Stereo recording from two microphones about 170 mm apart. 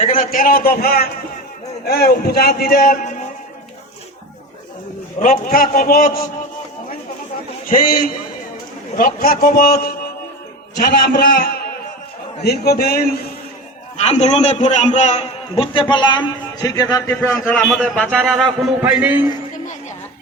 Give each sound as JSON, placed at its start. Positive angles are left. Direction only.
{"t": 0.0, "sound": "a man's voice", "side_deg": 55}
{"t": 5.2, "sound": "a man's voice", "side_deg": 55}
{"t": 7.7, "sound": "a man's voice", "side_deg": 55}
{"t": 13.9, "sound": "a man's voice", "side_deg": 40}
{"t": 17.6, "sound": "a man's voice", "side_deg": 0}
{"t": 18.8, "sound": "a man's voice", "side_deg": -10}